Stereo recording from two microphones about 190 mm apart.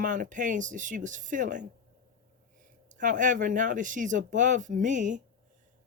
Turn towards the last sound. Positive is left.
turn(degrees=-40)  # may be behind; listen again after turning